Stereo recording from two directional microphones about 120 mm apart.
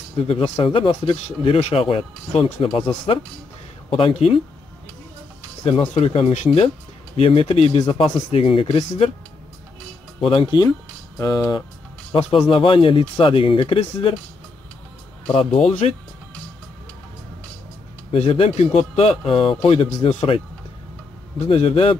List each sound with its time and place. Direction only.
0.3 s a man's voice: 50° left (ahead or behind)
5.6 s a man's voice: 55° left (ahead or behind)
7.2 s a man's voice: 50° left (ahead or behind)
10.2 s speech: 45° left (ahead or behind)
11.1 s speech: 30° left (ahead or behind)
12.1 s speech: 50° left (ahead or behind)
15.3 s speech: 65° left (ahead or behind)
18.1 s a man's voice: 55° left (ahead or behind)
21.5 s speech: 50° left (ahead or behind)